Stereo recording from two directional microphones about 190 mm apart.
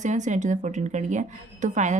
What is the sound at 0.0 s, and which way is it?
Speech, 40° right (ahead or behind).